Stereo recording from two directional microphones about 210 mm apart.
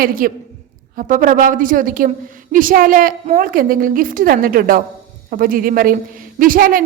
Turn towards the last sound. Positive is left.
turn(degrees=-40)  # may be behind; listen again after turning